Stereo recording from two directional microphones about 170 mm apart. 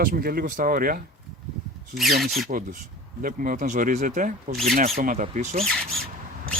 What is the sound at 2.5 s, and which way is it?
Speech, 50° right (ahead or behind).